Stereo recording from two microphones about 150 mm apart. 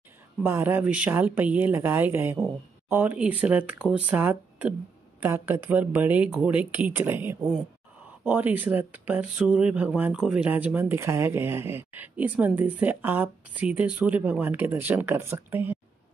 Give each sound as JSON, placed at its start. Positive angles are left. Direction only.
{"t": 0.4, "sound": "speech", "side_deg": -15}